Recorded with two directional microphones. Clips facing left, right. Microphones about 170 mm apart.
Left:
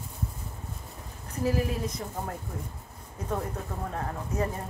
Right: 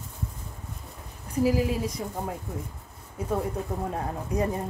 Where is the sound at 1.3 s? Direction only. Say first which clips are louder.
Right 4 dB; 10° right (ahead or behind).